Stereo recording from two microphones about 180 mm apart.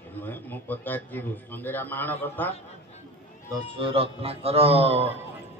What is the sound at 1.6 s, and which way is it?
Speech, 10° left (ahead or behind).